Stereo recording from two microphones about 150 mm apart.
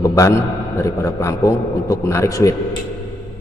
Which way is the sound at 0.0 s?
20° left (ahead or behind).